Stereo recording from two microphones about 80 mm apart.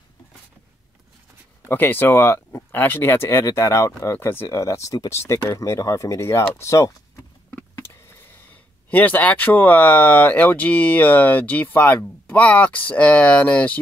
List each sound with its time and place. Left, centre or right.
1.6 s speech: left
5.1 s speech: left
8.9 s speech: left